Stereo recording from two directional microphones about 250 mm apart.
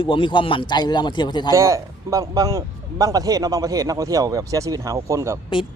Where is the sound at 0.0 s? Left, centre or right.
Centre.